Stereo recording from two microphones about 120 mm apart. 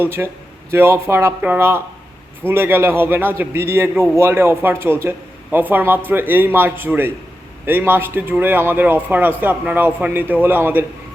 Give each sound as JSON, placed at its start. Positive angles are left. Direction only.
{"t": 0.0, "sound": "a man's voice", "side_deg": -20}